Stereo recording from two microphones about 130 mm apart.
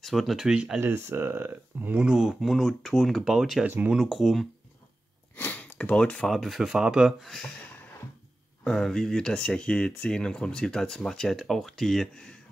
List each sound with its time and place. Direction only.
0.0 s speech: centre (ahead or behind)
3.6 s speech: 15° right (ahead or behind)
5.3 s speech: 15° left (ahead or behind)
8.6 s speech: 5° left (ahead or behind)